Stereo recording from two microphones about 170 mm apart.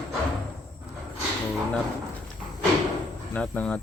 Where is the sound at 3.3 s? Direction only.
5° left (ahead or behind).